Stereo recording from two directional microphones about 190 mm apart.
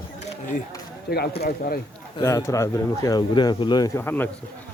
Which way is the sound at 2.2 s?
15° left (ahead or behind).